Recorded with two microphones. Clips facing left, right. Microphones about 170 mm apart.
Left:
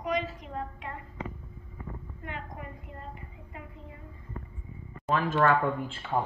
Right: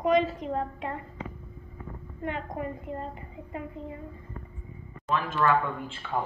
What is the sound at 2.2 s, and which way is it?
A woman's voice, 30° right (ahead or behind).